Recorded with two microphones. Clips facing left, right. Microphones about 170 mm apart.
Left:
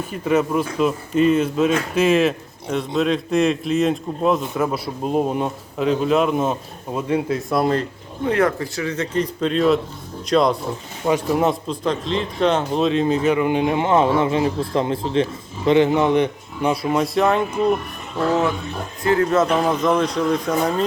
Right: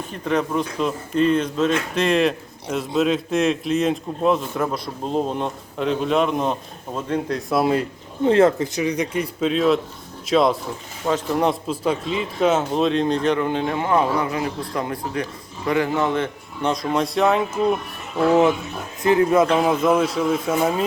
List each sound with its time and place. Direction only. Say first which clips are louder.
0.1 s speech: left 3 dB; 5° left (ahead or behind)
8.2 s speech: right 4 dB; 25° right (ahead or behind); by 10.6 s centre (ahead or behind)
11.0 s speech: left 2 dB; 10° left (ahead or behind); by 20.8 s 5° right (ahead or behind)